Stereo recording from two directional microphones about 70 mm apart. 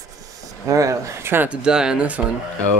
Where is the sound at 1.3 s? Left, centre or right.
Centre.